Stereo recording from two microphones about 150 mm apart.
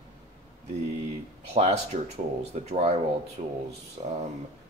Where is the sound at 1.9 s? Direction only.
65° right (ahead or behind).